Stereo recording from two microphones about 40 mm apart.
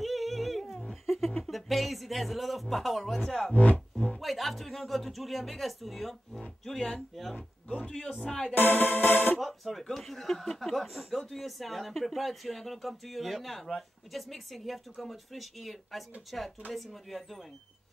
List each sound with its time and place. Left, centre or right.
0.0 s wild animals: centre
1.0 s a sound: centre
1.4 s speech: centre
3.5 s speech: left
3.9 s music: centre
4.2 s speech: centre
7.7 s speech: centre
8.5 s music: left
9.4 s speech: centre